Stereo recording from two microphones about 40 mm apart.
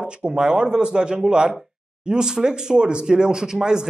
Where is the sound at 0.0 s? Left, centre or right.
Right.